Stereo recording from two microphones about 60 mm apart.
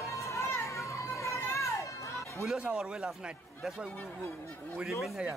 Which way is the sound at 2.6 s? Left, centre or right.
Centre.